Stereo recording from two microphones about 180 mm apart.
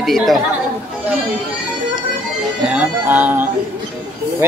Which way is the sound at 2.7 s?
10° right (ahead or behind).